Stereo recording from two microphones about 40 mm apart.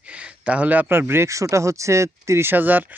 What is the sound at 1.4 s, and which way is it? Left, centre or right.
Speech, right.